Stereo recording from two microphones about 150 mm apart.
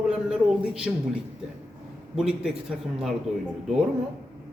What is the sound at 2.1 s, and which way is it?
Speech, 5° right (ahead or behind).